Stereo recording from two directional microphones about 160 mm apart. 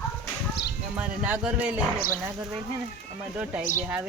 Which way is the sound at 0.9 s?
10° right (ahead or behind).